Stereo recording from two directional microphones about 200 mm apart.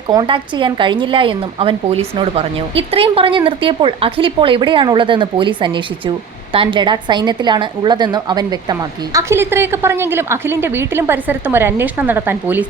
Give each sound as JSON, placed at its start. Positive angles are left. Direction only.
{"t": 0.1, "sound": "a woman's voice", "side_deg": -25}